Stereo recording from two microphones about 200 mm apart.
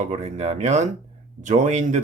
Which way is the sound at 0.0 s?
35° right (ahead or behind).